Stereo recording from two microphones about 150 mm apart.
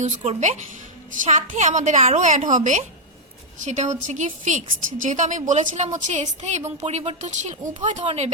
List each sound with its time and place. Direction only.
0.0 s a woman's voice: 50° right (ahead or behind)